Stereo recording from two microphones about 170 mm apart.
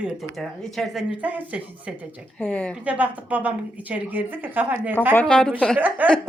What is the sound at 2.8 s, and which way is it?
A woman's voice, 10° right (ahead or behind).